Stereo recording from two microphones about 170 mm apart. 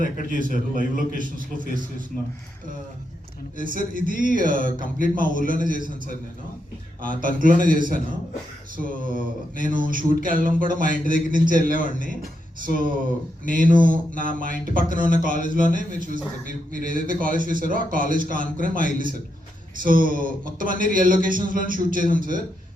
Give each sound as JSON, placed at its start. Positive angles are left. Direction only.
{"t": 0.0, "sound": "a man's voice", "side_deg": 55}
{"t": 1.2, "sound": "speech", "side_deg": -55}
{"t": 3.6, "sound": "speech", "side_deg": -55}
{"t": 7.0, "sound": "speech", "side_deg": -55}
{"t": 19.8, "sound": "speech", "side_deg": -55}